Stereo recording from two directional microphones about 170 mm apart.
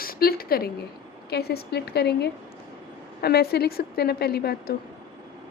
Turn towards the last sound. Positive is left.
turn(degrees=65)  # may be behind; listen again after turning